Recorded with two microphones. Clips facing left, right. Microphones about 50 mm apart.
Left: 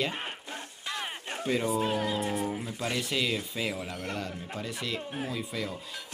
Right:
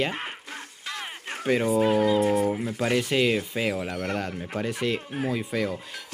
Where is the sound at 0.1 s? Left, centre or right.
Right.